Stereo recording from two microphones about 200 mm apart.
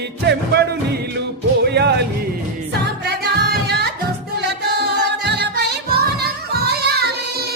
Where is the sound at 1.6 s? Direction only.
55° right (ahead or behind).